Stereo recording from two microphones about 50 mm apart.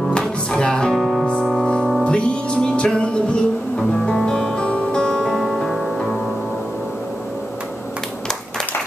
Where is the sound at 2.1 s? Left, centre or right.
Left.